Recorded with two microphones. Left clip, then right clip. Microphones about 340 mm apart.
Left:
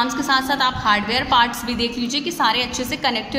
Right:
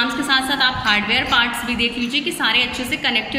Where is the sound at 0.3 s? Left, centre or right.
Left.